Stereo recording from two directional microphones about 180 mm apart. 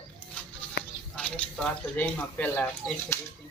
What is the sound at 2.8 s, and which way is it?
Speech, 5° left (ahead or behind).